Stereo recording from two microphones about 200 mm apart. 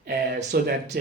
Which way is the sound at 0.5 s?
50° right (ahead or behind).